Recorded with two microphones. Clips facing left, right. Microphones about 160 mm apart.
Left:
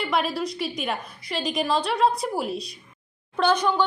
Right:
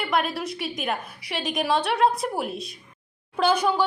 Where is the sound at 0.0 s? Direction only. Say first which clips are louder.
Even; centre (ahead or behind).